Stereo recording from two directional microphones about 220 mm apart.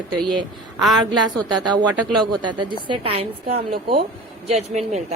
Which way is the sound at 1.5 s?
20° right (ahead or behind).